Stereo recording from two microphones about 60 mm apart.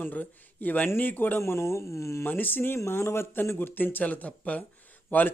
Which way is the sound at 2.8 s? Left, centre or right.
Left.